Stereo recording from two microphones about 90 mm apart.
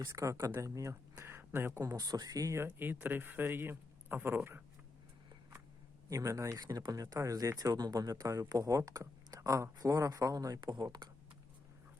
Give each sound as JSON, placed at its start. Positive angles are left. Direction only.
{"t": 0.1, "sound": "speech", "side_deg": -30}
{"t": 1.2, "sound": "a sound", "side_deg": -25}
{"t": 1.8, "sound": "speech", "side_deg": -40}
{"t": 2.7, "sound": "speech", "side_deg": -25}
{"t": 6.1, "sound": "speech", "side_deg": -40}